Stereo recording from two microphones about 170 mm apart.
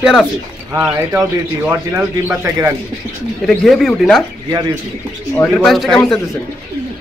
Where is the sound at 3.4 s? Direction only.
Centre (ahead or behind).